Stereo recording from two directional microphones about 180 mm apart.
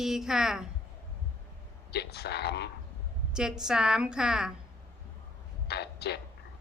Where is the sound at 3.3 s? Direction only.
5° right (ahead or behind).